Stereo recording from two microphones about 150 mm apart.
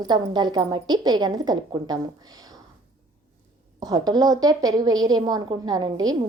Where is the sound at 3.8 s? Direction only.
25° right (ahead or behind).